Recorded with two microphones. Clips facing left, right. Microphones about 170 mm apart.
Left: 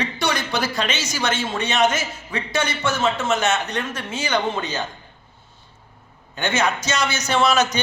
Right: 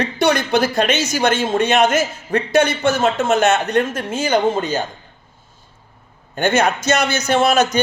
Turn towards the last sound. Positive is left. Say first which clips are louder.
# right 4 dB
turn(degrees=-50)  # may be behind; listen again after turning